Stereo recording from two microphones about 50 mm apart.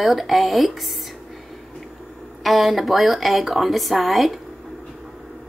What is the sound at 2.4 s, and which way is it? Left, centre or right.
A woman's voice, centre.